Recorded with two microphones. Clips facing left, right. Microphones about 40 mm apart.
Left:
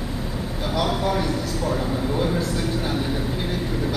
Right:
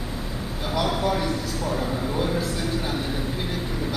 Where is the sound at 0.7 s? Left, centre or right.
Centre.